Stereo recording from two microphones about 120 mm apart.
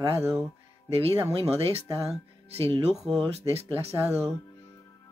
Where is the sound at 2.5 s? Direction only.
55° right (ahead or behind).